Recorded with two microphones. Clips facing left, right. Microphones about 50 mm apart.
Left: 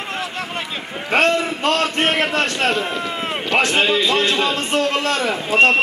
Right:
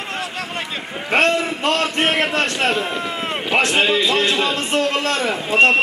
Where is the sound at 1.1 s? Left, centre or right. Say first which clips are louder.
Even; centre.